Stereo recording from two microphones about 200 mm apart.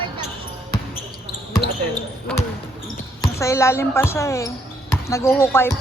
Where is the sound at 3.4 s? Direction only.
15° left (ahead or behind).